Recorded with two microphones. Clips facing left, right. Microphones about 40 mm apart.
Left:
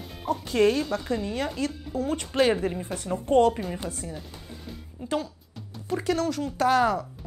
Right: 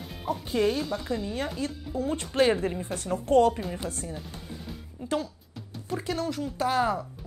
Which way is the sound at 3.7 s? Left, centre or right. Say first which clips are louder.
Even; left.